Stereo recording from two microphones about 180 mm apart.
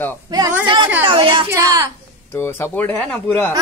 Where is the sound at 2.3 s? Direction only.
15° left (ahead or behind).